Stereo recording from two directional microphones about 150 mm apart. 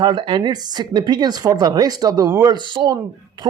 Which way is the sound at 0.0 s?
30° right (ahead or behind).